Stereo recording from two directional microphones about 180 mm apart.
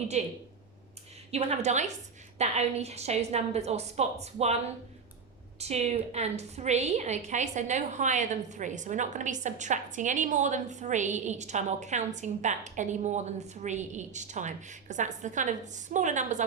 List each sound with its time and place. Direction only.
0.1 s a woman's voice: 40° right (ahead or behind)